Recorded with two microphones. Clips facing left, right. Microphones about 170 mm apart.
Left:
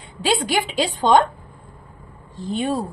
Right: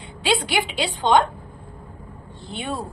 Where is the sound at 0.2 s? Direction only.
40° left (ahead or behind).